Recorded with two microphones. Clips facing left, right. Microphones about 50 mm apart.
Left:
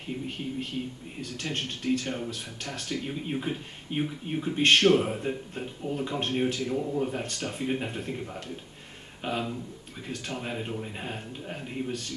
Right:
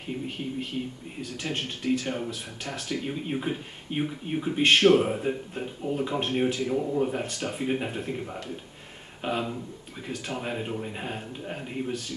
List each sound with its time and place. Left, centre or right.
0.0 s speech: centre